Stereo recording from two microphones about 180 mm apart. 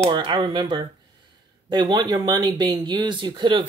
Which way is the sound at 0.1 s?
25° right (ahead or behind).